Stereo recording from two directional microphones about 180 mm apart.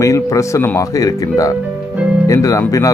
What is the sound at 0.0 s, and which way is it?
Speech, 15° left (ahead or behind).